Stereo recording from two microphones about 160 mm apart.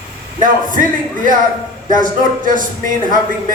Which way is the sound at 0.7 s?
55° right (ahead or behind).